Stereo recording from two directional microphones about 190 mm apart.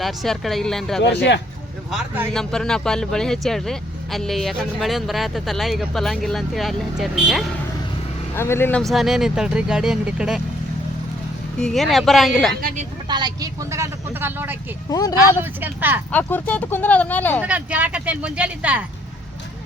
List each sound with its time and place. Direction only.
0.0 s speech: centre (ahead or behind)
1.0 s speech: 65° left (ahead or behind)
1.9 s speech: centre (ahead or behind)
8.4 s speech: 10° left (ahead or behind); by 10.4 s 5° right (ahead or behind)
11.6 s speech: centre (ahead or behind)
13.1 s speech: 20° right (ahead or behind)
14.8 s speech: 20° left (ahead or behind)
15.6 s speech: 10° right (ahead or behind)
16.1 s speech: 10° left (ahead or behind)
17.4 s speech: 5° right (ahead or behind)